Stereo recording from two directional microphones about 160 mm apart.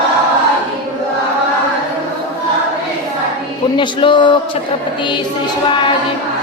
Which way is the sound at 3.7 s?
30° left (ahead or behind).